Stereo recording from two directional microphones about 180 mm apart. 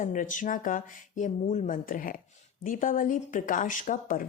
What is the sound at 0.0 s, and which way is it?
Speech, 45° left (ahead or behind).